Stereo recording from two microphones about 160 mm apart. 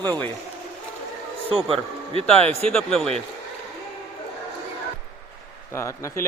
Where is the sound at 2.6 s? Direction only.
5° left (ahead or behind).